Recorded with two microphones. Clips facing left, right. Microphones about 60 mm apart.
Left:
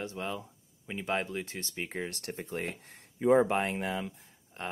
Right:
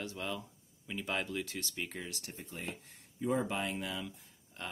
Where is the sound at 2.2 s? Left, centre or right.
Left.